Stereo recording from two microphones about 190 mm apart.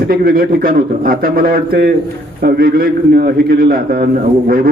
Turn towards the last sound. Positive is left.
turn(degrees=-50)  # may be behind; listen again after turning